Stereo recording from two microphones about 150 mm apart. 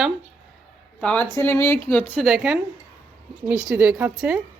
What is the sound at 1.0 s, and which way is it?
Speech, 10° left (ahead or behind).